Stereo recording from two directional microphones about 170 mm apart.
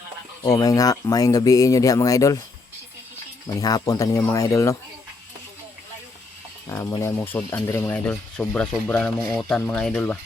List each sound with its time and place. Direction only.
0.4 s speech: 20° left (ahead or behind)
3.6 s speech: 20° left (ahead or behind)
6.7 s speech: 15° left (ahead or behind)